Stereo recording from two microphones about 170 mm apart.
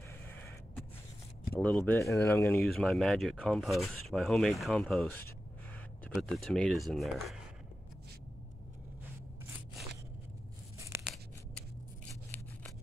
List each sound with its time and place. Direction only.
1.5 s speech: 10° left (ahead or behind)
2.6 s speech: centre (ahead or behind)
6.2 s speech: centre (ahead or behind)
10.9 s a sound: 15° right (ahead or behind)